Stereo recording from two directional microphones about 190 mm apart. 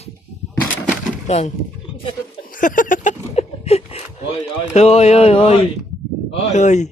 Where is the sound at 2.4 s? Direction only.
45° left (ahead or behind).